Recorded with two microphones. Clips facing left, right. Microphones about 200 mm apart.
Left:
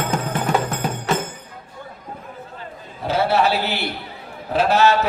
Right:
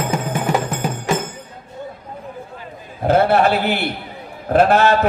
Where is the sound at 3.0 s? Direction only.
50° right (ahead or behind).